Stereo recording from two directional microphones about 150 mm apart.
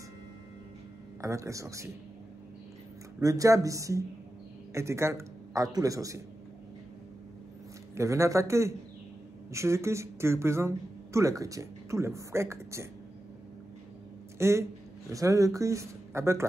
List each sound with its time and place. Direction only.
1.2 s speech: 20° right (ahead or behind)
3.2 s speech: 20° right (ahead or behind)
7.9 s speech: 20° right (ahead or behind)
14.4 s speech: 20° right (ahead or behind)